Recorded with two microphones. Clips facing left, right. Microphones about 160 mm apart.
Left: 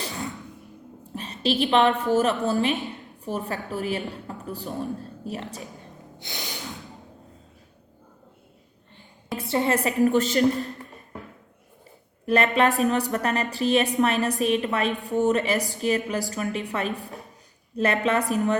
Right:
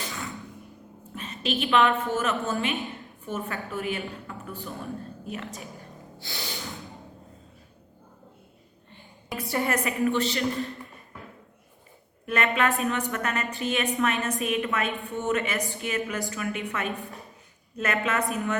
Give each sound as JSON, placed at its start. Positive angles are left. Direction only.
{"t": 1.1, "sound": "a woman's voice", "side_deg": 35}
{"t": 4.1, "sound": "a sound", "side_deg": 35}
{"t": 4.6, "sound": "a woman's voice", "side_deg": 35}
{"t": 6.1, "sound": "snort", "side_deg": 20}
{"t": 9.3, "sound": "a woman's voice", "side_deg": 25}
{"t": 12.2, "sound": "a woman's voice", "side_deg": 35}